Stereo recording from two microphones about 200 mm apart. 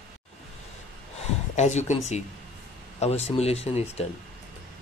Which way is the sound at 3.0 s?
30° left (ahead or behind).